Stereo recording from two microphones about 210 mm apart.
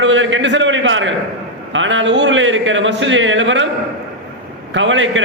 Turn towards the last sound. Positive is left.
turn(degrees=-65)  # may be behind; listen again after turning